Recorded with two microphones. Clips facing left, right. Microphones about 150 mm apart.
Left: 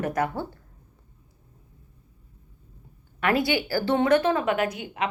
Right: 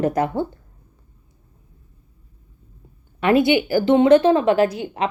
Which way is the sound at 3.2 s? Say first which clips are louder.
Right 7 dB; 20° right (ahead or behind).